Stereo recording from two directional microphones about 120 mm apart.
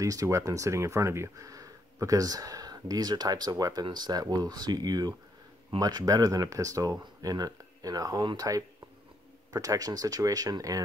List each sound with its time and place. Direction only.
0.0 s speech: 30° right (ahead or behind)